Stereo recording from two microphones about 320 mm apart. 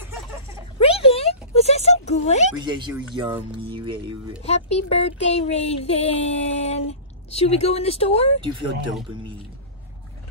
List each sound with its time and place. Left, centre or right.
0.7 s music: centre
2.6 s speech: centre
4.5 s speech: centre
8.4 s speech: centre